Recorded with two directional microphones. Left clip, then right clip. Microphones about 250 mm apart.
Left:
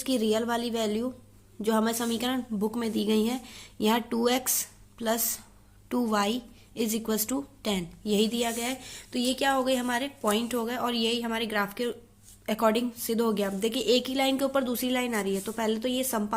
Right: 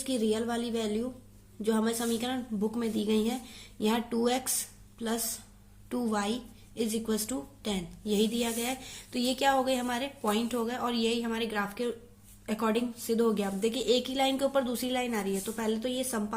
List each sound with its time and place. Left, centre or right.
0.0 s a woman's voice: left